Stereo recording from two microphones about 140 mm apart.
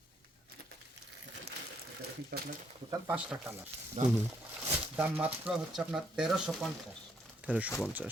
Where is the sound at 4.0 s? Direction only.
55° right (ahead or behind).